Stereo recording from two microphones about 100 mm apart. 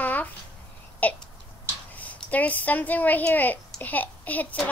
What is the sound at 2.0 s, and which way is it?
A woman's voice, 15° left (ahead or behind).